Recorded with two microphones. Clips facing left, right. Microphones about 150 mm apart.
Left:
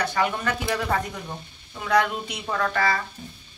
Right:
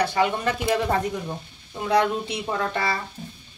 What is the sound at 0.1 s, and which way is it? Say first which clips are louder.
Speech: right 2 dB; 25° right (ahead or behind).